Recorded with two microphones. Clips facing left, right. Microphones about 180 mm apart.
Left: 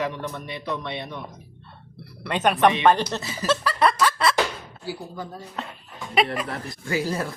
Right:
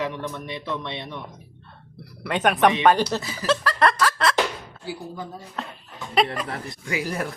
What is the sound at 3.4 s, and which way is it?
Snicker, 5° left (ahead or behind).